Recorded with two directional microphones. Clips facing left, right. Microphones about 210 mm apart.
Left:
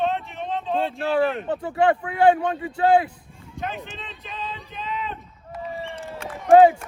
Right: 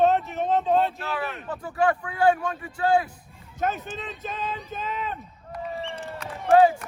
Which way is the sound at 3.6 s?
45° right (ahead or behind).